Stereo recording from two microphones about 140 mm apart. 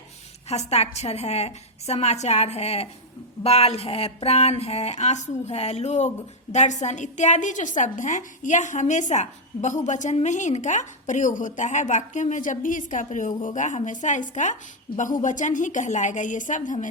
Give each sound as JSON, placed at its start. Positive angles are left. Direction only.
{"t": 0.4, "sound": "a woman's voice", "side_deg": 50}